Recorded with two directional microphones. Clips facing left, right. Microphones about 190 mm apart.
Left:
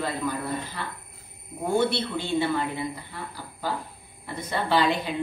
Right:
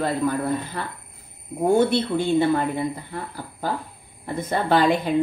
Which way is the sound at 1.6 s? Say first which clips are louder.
Right 6 dB; 50° right (ahead or behind).